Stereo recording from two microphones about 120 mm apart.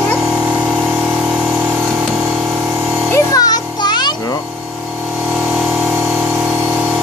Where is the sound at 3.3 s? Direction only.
30° left (ahead or behind).